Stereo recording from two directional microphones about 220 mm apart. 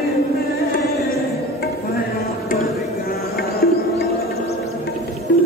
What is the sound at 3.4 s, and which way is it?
Music, 45° left (ahead or behind).